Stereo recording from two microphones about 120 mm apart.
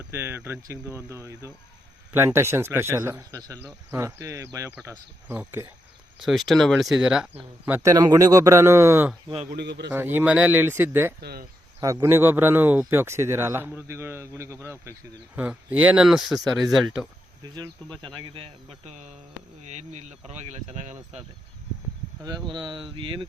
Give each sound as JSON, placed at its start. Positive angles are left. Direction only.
{"t": 0.1, "sound": "speech", "side_deg": -20}
{"t": 6.2, "sound": "speech", "side_deg": 0}
{"t": 7.9, "sound": "speech", "side_deg": -35}
{"t": 9.3, "sound": "a man's voice", "side_deg": -65}
{"t": 9.9, "sound": "speech", "side_deg": -15}
{"t": 17.6, "sound": "speech", "side_deg": 10}
{"t": 18.1, "sound": "speech", "side_deg": -45}
{"t": 19.6, "sound": "speech", "side_deg": -75}
{"t": 22.4, "sound": "speech", "side_deg": -40}